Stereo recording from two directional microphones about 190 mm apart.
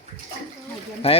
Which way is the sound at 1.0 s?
30° left (ahead or behind).